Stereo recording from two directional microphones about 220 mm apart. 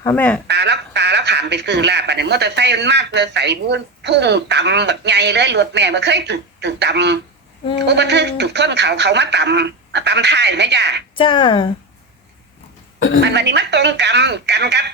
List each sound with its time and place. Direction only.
0.0 s speech: 10° left (ahead or behind)
0.4 s speech: 50° right (ahead or behind)
11.1 s speech: 20° left (ahead or behind)
13.2 s speech: 50° right (ahead or behind)